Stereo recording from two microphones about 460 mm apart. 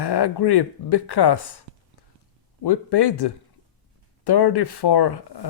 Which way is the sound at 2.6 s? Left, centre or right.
Left.